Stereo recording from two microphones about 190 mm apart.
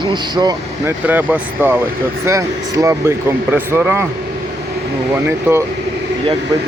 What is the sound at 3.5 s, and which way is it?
Speech, 10° right (ahead or behind).